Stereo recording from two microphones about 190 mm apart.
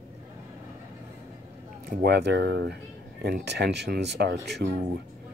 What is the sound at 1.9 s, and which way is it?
Speech, 55° right (ahead or behind).